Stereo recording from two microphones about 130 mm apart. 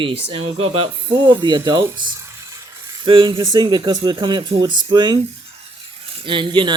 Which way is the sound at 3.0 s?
40° right (ahead or behind).